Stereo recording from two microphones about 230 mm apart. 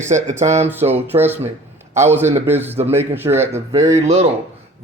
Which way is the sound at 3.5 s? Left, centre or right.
Right.